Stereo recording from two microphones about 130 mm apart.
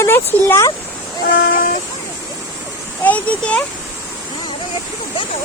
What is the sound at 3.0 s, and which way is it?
Speech, 10° left (ahead or behind).